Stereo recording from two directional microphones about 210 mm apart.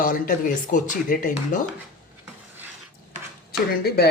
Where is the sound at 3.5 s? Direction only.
50° left (ahead or behind).